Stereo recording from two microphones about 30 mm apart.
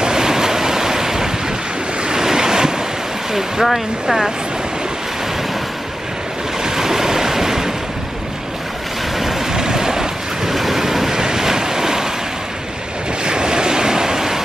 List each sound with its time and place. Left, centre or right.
0.0 s waves: centre
3.6 s speech: centre
6.6 s waves: centre
9.5 s waves: right
10.5 s waves: centre
13.2 s waves: right